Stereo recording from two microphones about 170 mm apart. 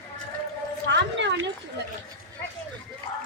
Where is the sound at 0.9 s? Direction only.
90° right.